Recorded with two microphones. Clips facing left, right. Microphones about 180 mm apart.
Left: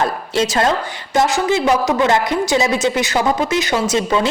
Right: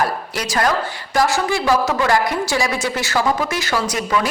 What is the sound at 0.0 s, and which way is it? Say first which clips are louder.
A woman's voice: left 4 dB; 25° left (ahead or behind).